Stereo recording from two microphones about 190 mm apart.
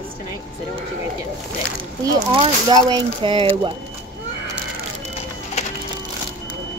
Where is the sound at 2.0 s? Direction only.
25° right (ahead or behind).